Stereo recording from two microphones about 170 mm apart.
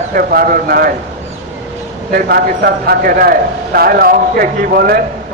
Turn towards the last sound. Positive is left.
turn(degrees=-60)  # may be behind; listen again after turning